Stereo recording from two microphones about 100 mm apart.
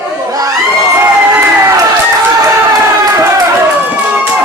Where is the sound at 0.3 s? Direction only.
35° right (ahead or behind).